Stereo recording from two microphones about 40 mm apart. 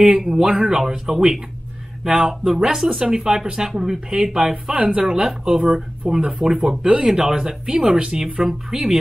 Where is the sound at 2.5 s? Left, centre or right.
Centre.